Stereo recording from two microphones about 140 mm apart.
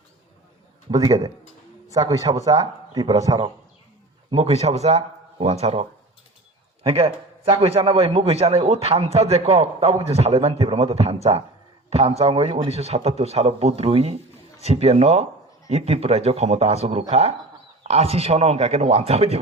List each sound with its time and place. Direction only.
0.9 s a man's voice: 25° right (ahead or behind)
4.3 s a man's voice: 45° right (ahead or behind)